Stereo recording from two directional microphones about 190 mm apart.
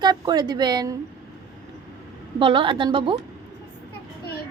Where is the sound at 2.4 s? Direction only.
25° right (ahead or behind).